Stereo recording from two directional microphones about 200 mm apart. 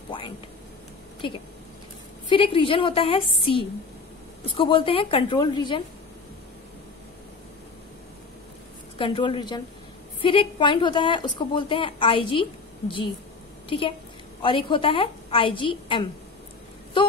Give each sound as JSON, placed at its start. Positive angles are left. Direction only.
{"t": 0.1, "sound": "a sound", "side_deg": 25}
{"t": 2.3, "sound": "a woman's voice", "side_deg": 25}
{"t": 8.9, "sound": "a woman's voice", "side_deg": 25}